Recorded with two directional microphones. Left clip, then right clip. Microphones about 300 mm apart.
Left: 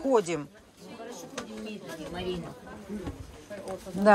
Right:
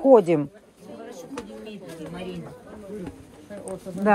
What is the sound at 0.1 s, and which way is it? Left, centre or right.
Speech, centre.